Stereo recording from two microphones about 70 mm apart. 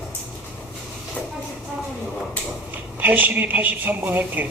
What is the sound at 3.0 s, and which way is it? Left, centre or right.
A man's voice, right.